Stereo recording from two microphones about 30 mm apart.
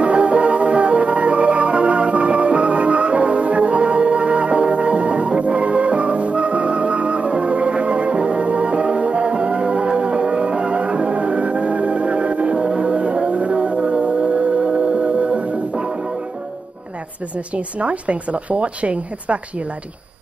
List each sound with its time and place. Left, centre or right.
0.0 s music: right
17.7 s speech: right